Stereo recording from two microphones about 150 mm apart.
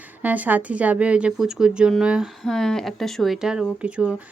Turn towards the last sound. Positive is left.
turn(degrees=-5)  # may be behind; listen again after turning